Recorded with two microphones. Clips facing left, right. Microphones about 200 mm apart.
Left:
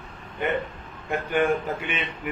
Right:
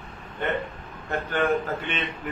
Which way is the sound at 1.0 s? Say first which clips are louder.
Left 2 dB; 10° left (ahead or behind).